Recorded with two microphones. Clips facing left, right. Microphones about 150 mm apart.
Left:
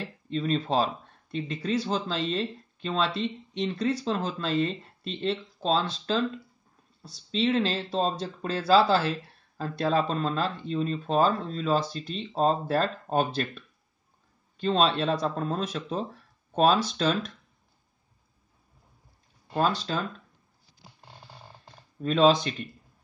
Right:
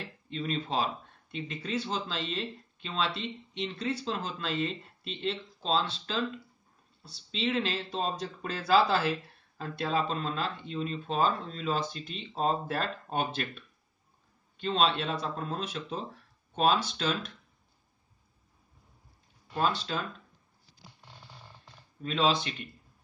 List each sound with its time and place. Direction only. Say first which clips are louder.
0.3 s speech: left 6 dB; 40° left (ahead or behind)
19.5 s speech: left 4 dB; 40° left (ahead or behind)
22.0 s speech: left 7 dB; 45° left (ahead or behind)